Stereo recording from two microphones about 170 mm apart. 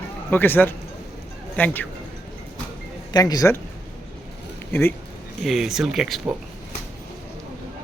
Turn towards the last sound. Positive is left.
turn(degrees=0)  # may be behind; listen again after turning